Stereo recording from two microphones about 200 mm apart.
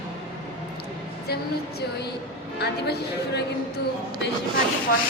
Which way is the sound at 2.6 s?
55° left (ahead or behind).